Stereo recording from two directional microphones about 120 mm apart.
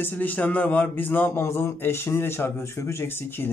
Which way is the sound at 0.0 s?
15° left (ahead or behind).